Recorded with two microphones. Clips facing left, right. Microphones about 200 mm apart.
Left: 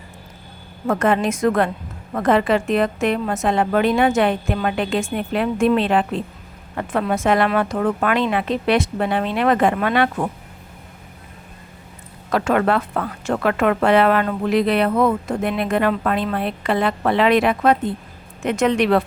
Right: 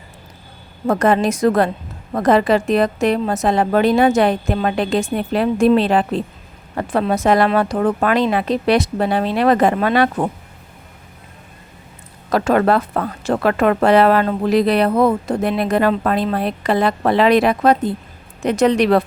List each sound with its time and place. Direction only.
0.9 s a woman's voice: 35° right (ahead or behind)
12.3 s a woman's voice: 35° right (ahead or behind)